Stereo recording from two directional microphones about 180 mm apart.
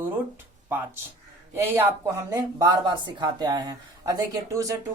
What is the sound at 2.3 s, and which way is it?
Speech, 20° right (ahead or behind).